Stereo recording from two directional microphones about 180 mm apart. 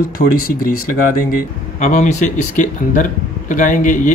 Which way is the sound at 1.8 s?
40° left (ahead or behind).